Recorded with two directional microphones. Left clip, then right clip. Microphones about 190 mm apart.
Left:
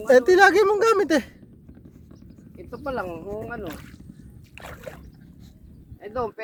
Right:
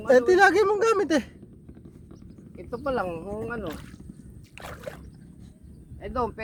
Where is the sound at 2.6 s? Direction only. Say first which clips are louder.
Right 2 dB; 25° right (ahead or behind).